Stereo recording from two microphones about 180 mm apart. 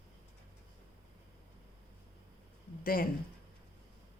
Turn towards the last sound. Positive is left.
turn(degrees=55)  # may be behind; listen again after turning